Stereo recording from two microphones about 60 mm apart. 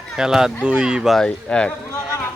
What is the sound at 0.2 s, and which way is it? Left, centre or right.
Speech, centre.